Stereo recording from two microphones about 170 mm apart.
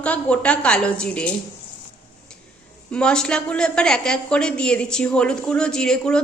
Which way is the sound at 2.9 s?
5° left (ahead or behind).